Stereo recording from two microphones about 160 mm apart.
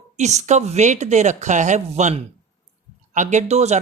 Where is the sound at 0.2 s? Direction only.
45° right (ahead or behind).